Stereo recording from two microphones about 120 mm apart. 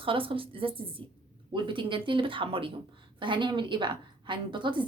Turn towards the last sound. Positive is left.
turn(degrees=-40)  # may be behind; listen again after turning